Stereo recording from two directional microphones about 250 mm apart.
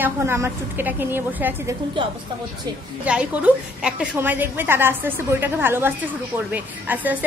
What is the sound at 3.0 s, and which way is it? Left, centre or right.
A woman's voice, centre.